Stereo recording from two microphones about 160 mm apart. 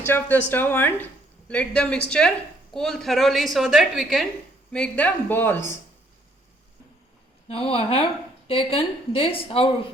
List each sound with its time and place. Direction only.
0.0 s a woman's voice: 10° left (ahead or behind)
7.4 s a woman's voice: 35° left (ahead or behind)